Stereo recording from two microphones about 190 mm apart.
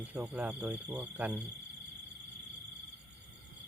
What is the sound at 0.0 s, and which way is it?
Speech, 10° right (ahead or behind).